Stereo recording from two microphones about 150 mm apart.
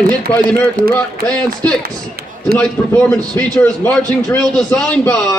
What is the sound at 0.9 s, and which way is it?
Speech, 10° left (ahead or behind).